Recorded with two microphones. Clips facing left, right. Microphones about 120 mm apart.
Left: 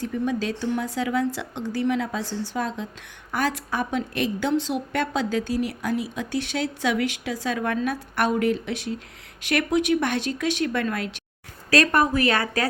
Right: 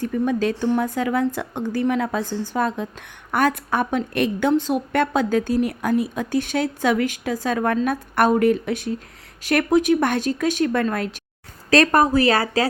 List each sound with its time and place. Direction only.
0.0 s a woman's voice: 50° right (ahead or behind); by 12.6 s 35° right (ahead or behind)